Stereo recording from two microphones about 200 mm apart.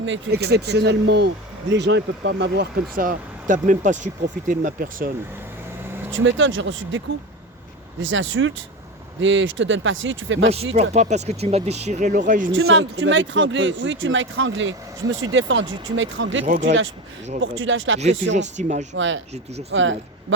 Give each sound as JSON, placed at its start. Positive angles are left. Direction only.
{"t": 0.0, "sound": "speech", "side_deg": -60}
{"t": 2.9, "sound": "speech", "side_deg": -45}
{"t": 6.1, "sound": "speech", "side_deg": -70}
{"t": 8.0, "sound": "speech", "side_deg": -70}
{"t": 10.8, "sound": "speech", "side_deg": -35}
{"t": 12.5, "sound": "speech", "side_deg": -80}
{"t": 16.5, "sound": "speech", "side_deg": -35}
{"t": 17.4, "sound": "speech", "side_deg": -70}
{"t": 18.3, "sound": "speech", "side_deg": -35}
{"t": 18.9, "sound": "speech", "side_deg": -70}
{"t": 19.3, "sound": "speech", "side_deg": -30}
{"t": 19.7, "sound": "speech", "side_deg": -70}